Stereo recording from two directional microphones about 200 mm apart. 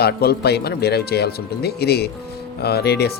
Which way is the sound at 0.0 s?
55° left (ahead or behind).